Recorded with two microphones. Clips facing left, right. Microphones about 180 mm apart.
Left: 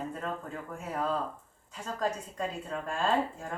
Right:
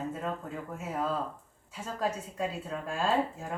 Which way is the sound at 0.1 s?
5° right (ahead or behind).